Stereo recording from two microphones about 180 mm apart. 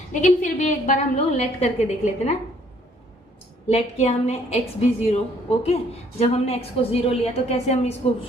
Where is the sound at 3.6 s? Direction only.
35° left (ahead or behind).